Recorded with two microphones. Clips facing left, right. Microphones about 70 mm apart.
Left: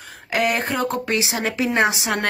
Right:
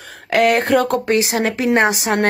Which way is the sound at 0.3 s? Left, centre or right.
Right.